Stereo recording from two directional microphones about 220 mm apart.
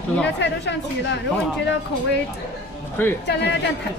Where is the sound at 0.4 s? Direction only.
55° left (ahead or behind).